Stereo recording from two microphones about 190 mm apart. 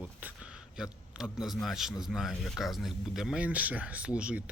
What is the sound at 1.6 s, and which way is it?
Speech, centre (ahead or behind).